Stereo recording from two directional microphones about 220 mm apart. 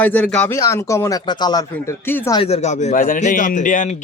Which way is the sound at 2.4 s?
30° left (ahead or behind).